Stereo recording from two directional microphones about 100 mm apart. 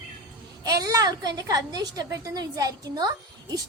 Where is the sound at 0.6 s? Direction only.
35° right (ahead or behind).